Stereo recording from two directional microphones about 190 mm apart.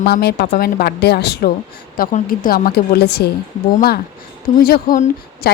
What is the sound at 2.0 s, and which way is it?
A woman's voice, 45° left (ahead or behind).